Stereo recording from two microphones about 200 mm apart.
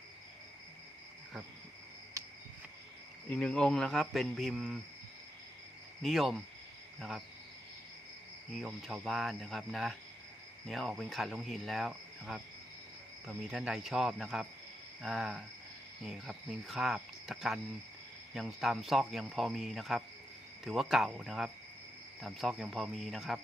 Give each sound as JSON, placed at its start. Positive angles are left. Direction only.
{"t": 2.2, "sound": "a sound", "side_deg": -15}
{"t": 3.2, "sound": "speech", "side_deg": 5}
{"t": 6.0, "sound": "speech", "side_deg": 0}
{"t": 8.5, "sound": "speech", "side_deg": 0}